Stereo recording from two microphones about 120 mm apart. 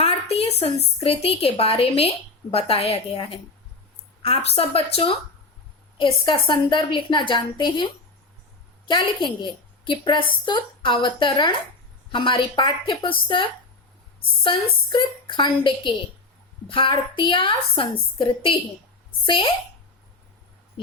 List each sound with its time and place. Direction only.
0.0 s a sound: 55° left (ahead or behind)
1.0 s a woman's voice: 55° left (ahead or behind)
6.0 s a woman's voice: 40° left (ahead or behind)
8.9 s a woman's voice: 40° left (ahead or behind)